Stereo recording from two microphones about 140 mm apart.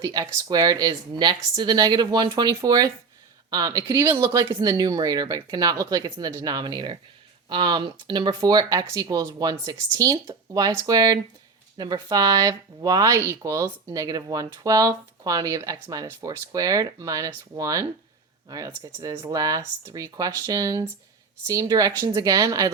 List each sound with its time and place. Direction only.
0.0 s speech: 25° right (ahead or behind)